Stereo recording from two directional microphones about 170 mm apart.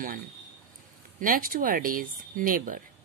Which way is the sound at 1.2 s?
55° right (ahead or behind).